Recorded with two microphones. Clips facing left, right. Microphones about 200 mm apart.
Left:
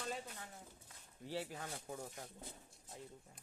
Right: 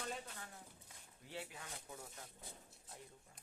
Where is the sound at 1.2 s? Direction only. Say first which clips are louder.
Left 6 dB; 40° left (ahead or behind).